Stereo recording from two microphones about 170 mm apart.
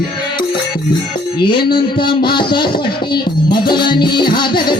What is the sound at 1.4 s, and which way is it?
Music, 25° left (ahead or behind).